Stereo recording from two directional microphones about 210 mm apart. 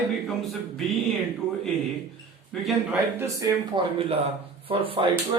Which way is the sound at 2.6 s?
10° right (ahead or behind).